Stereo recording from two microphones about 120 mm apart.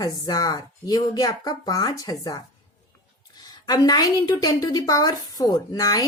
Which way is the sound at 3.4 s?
35° left (ahead or behind).